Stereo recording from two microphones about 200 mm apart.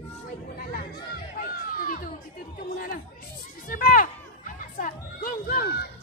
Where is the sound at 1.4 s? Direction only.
45° left (ahead or behind).